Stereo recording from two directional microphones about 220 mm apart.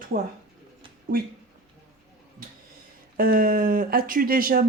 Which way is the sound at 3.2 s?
40° right (ahead or behind).